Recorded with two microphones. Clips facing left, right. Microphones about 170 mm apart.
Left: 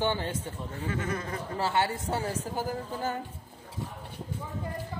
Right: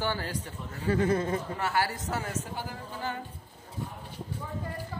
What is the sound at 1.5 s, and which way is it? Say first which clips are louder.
A woman's voice: left 2 dB; 25° left (ahead or behind).